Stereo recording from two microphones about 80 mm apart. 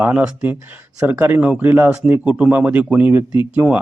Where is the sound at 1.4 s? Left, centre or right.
Centre.